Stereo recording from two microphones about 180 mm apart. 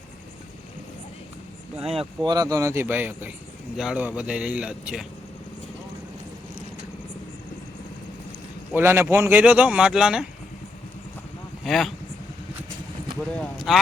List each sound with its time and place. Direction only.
1.9 s speech: 30° right (ahead or behind)
2.3 s speech: 20° right (ahead or behind)
8.7 s speech: 15° right (ahead or behind)
11.6 s speech: centre (ahead or behind)
13.3 s speech: 5° left (ahead or behind)